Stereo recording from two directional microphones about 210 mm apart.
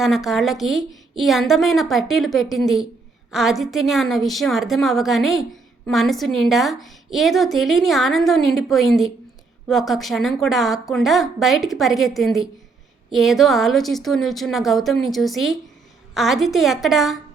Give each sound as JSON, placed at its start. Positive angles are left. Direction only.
{"t": 0.0, "sound": "a woman's voice", "side_deg": 0}